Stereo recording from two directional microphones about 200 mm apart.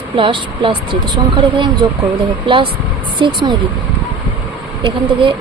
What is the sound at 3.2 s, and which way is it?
Speech, 25° right (ahead or behind).